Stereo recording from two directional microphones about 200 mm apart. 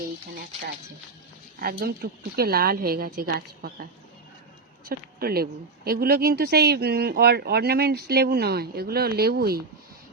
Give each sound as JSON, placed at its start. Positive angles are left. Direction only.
{"t": 1.8, "sound": "speech", "side_deg": -50}
{"t": 4.9, "sound": "speech", "side_deg": -50}